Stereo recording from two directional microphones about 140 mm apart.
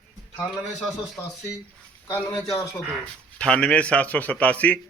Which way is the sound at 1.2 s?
15° left (ahead or behind).